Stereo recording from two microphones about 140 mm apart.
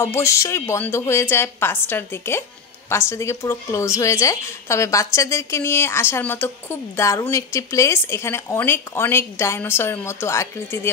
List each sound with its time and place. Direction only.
0.0 s a woman's voice: 20° left (ahead or behind)